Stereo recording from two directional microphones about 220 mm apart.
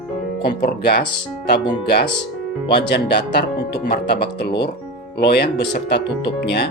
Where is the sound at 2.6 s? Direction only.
50° left (ahead or behind).